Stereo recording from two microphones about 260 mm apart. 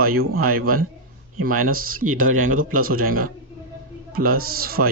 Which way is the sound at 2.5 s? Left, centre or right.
Right.